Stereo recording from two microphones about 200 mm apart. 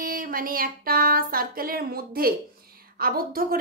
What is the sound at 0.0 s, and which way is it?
A woman's voice, 45° right (ahead or behind).